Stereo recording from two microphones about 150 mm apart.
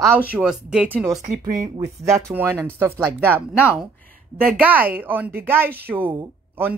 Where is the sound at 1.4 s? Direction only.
25° right (ahead or behind).